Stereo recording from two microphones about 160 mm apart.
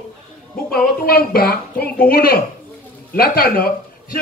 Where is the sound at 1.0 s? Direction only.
70° left (ahead or behind).